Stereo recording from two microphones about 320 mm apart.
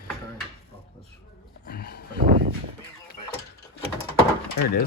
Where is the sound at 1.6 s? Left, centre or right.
Left.